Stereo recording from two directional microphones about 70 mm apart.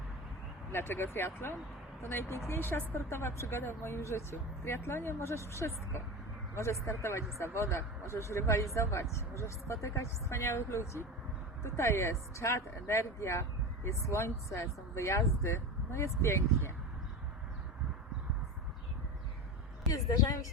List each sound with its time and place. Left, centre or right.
0.7 s speech: left
19.9 s a woman's voice: left